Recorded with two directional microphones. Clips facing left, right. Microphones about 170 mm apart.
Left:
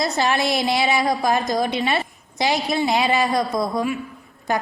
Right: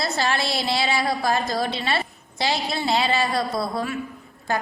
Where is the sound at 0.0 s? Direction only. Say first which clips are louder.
Left 4 dB; 20° left (ahead or behind).